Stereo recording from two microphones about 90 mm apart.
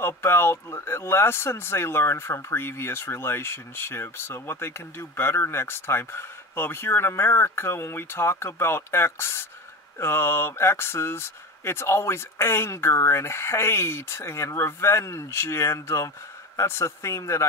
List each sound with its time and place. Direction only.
0.0 s a man's voice: 30° left (ahead or behind)